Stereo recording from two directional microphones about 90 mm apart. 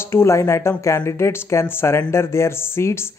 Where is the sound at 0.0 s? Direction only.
30° left (ahead or behind).